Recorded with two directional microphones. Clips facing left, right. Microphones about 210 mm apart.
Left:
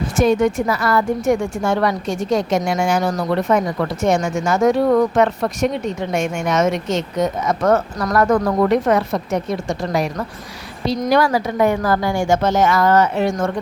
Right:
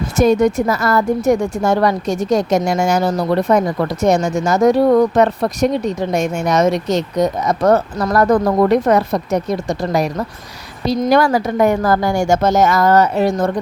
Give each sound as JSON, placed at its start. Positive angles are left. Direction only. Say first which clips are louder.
{"t": 0.2, "sound": "a woman's voice", "louder": "right 3 dB", "side_deg": -40}
{"t": 11.1, "sound": "a woman's voice", "louder": "right 2 dB", "side_deg": -50}